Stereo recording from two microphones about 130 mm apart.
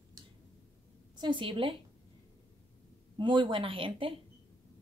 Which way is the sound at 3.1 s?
40° right (ahead or behind).